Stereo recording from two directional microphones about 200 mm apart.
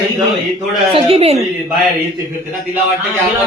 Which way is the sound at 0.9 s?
30° right (ahead or behind).